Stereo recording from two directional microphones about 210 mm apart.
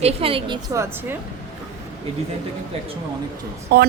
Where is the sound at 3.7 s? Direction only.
50° right (ahead or behind).